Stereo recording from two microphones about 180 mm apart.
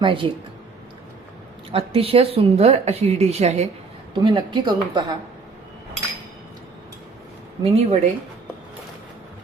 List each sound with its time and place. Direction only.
0.0 s a woman's voice: 30° right (ahead or behind)
1.7 s a woman's voice: 30° right (ahead or behind)
7.6 s speech: 40° right (ahead or behind)